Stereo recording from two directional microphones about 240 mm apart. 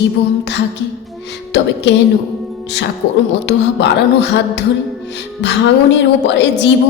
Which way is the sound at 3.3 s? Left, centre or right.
Left.